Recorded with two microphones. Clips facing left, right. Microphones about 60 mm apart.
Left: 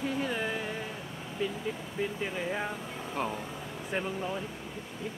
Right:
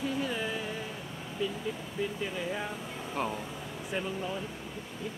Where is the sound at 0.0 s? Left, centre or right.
Left.